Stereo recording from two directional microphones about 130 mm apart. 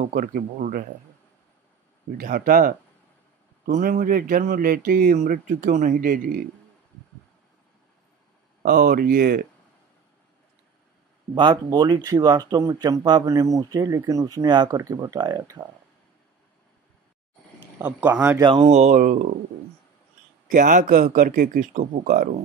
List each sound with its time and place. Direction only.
0.0 s speech: 90° right
2.1 s speech: 90° right
8.6 s speech: 90° right
11.3 s speech: 35° right (ahead or behind)
17.6 s speech: 15° right (ahead or behind)
18.4 s speech: 35° right (ahead or behind)
18.7 s speech: 60° right (ahead or behind); by 19.3 s 90° right
20.5 s speech: 90° right